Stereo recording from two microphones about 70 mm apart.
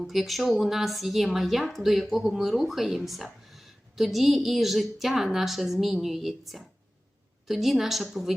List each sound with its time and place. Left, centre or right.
0.0 s a woman's voice: centre